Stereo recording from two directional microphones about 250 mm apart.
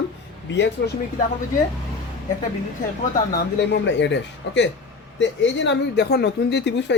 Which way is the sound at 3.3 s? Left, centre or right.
Left.